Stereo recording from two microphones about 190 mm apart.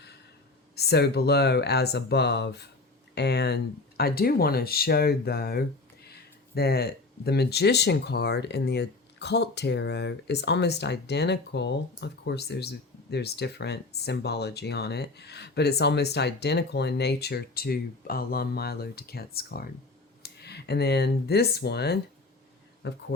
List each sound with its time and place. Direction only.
0.8 s speech: 60° left (ahead or behind)